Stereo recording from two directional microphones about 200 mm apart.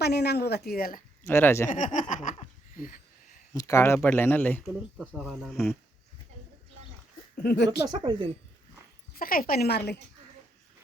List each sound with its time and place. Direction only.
0.0 s speech: 55° left (ahead or behind)
1.3 s a man's voice: 10° left (ahead or behind)
1.7 s laughter: 40° left (ahead or behind)
3.5 s a man's voice: 15° left (ahead or behind); by 5.7 s centre (ahead or behind)
7.4 s speech: 60° left (ahead or behind)
7.9 s speech: 20° right (ahead or behind)
9.1 s speech: 45° left (ahead or behind)